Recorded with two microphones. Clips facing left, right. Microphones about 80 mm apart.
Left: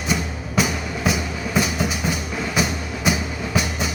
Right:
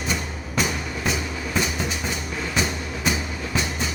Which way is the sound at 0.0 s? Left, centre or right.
Centre.